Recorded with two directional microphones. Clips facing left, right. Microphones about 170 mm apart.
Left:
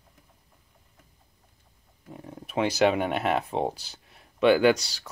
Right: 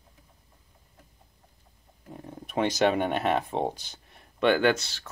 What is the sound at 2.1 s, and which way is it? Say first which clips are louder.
Speech: left 1 dB; 5° left (ahead or behind).